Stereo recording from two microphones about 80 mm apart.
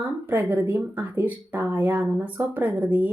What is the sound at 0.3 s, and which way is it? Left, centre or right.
Speech, right.